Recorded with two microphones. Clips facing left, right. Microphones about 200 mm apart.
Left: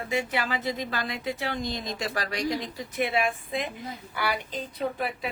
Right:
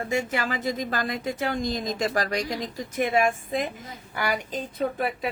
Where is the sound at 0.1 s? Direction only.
45° right (ahead or behind).